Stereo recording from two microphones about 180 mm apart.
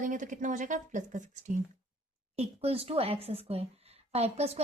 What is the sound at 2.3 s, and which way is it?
A woman's voice, 35° right (ahead or behind).